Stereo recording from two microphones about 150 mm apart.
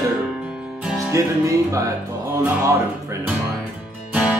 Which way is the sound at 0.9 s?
20° right (ahead or behind).